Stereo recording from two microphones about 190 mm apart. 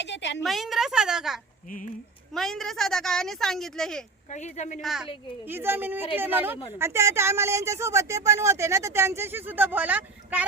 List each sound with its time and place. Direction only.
0.0 s a woman's voice: 70° left (ahead or behind)
0.4 s a woman's voice: centre (ahead or behind)
4.3 s speech: 40° left (ahead or behind)
4.8 s speech: centre (ahead or behind)
5.5 s speech: 10° right (ahead or behind)